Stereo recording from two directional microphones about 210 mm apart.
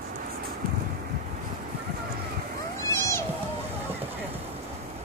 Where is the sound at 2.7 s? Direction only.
15° left (ahead or behind).